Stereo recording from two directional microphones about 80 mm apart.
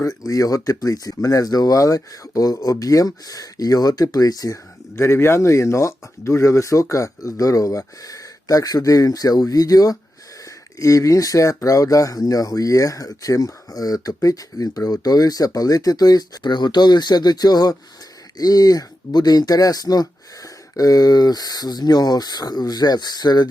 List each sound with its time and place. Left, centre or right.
0.0 s speech: left